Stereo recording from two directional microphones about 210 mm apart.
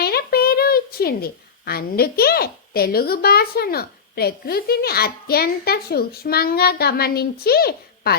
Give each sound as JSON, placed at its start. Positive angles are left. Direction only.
{"t": 0.0, "sound": "a woman's voice", "side_deg": 45}